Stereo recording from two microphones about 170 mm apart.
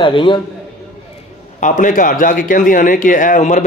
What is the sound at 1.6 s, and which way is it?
A man's voice, 50° left (ahead or behind).